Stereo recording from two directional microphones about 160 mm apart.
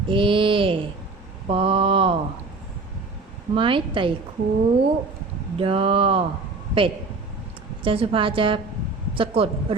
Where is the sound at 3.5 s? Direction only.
30° right (ahead or behind).